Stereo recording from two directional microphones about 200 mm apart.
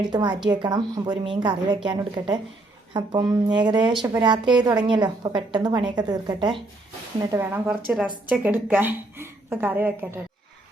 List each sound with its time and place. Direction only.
0.1 s a woman's voice: 20° right (ahead or behind)